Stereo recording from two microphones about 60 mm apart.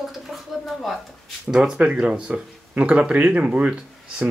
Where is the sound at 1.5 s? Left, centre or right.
Centre.